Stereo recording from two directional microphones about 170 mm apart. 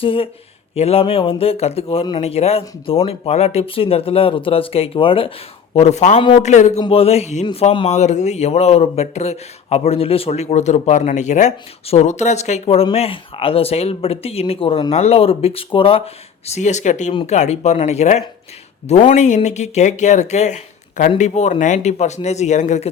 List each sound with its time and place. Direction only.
0.0 s a man's voice: 30° left (ahead or behind)
6.1 s speech: 30° left (ahead or behind)
6.4 s speech: 45° left (ahead or behind)
6.7 s a man's voice: 30° left (ahead or behind)
16.5 s a man's voice: 45° left (ahead or behind)